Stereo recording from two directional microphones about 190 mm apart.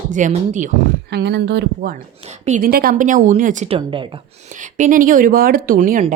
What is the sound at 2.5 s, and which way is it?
A woman's voice, 45° right (ahead or behind).